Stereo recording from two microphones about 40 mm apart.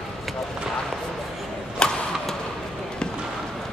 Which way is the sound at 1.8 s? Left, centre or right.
Left.